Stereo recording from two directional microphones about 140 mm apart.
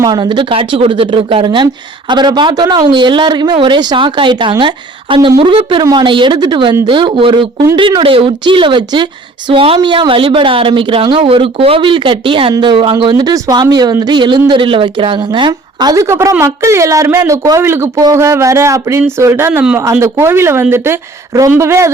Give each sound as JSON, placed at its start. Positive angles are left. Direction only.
{"t": 0.0, "sound": "a woman's voice", "side_deg": -30}